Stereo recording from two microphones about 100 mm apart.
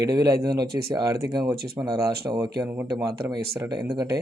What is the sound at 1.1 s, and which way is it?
Speech, 30° right (ahead or behind).